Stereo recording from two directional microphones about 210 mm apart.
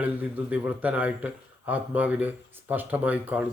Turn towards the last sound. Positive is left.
turn(degrees=-5)  # may be behind; listen again after turning